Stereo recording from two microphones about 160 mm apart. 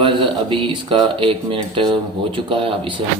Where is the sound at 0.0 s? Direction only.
30° right (ahead or behind).